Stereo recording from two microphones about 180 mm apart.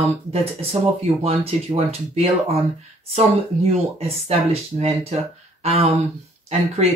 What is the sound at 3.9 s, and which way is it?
Speech, 35° right (ahead or behind).